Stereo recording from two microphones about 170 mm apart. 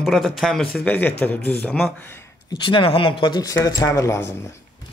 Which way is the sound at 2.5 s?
30° left (ahead or behind).